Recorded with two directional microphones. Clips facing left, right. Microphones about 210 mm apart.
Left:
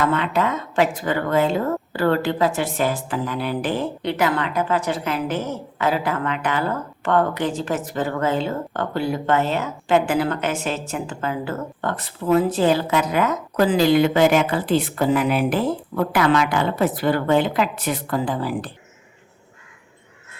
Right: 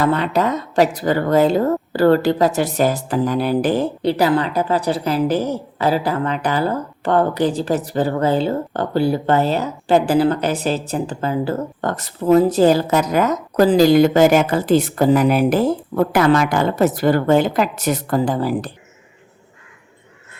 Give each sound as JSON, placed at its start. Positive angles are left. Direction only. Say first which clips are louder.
{"t": 0.0, "sound": "speech", "louder": "right 3 dB", "side_deg": -35}